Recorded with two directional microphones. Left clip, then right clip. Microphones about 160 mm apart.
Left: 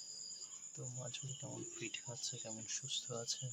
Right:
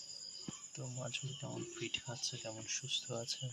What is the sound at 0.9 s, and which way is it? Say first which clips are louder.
Speech: right 6 dB; 5° right (ahead or behind).